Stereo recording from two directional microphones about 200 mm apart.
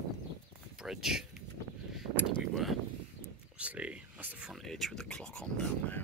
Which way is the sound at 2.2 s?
Centre (ahead or behind).